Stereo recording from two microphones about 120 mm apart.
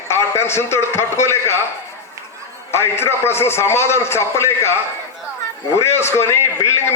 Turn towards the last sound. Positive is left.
turn(degrees=20)  # may be behind; listen again after turning